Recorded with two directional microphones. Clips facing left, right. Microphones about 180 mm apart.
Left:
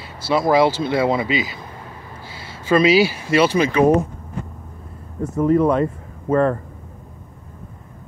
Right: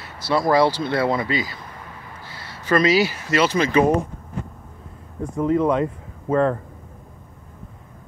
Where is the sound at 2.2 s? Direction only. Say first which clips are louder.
Left 2 dB; 25° left (ahead or behind).